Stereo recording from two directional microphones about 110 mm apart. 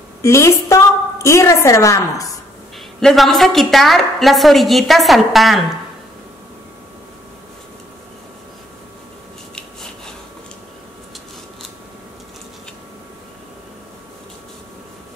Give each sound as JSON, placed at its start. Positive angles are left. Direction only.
{"t": 0.2, "sound": "a woman's voice", "side_deg": 25}
{"t": 3.0, "sound": "a woman's voice", "side_deg": 0}